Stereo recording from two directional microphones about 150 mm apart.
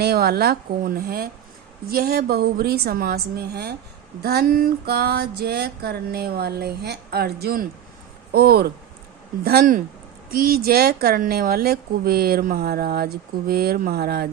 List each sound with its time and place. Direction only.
0.0 s speech: 90° right